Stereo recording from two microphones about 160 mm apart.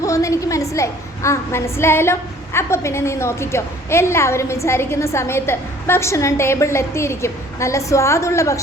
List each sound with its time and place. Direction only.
0.0 s a woman's voice: 20° left (ahead or behind)